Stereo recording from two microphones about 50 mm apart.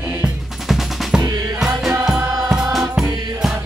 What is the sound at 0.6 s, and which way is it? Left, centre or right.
Music, centre.